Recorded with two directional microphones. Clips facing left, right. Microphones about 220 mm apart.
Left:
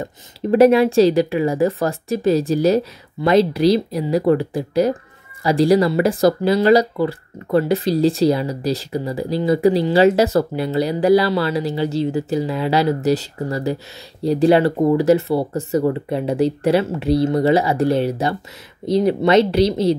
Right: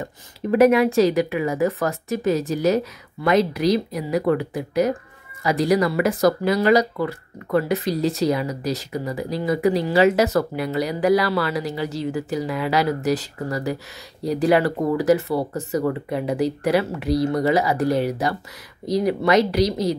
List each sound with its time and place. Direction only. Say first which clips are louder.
0.0 s speech: left 4 dB; 30° left (ahead or behind)